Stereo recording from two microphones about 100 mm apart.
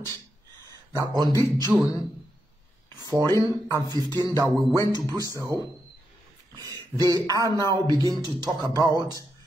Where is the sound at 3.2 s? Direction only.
35° left (ahead or behind).